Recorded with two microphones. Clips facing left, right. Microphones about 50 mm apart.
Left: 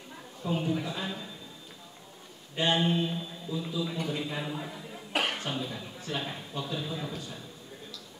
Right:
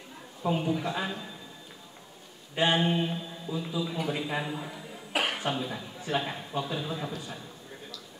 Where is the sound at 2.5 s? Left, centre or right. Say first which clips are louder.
Right 1 dB; centre.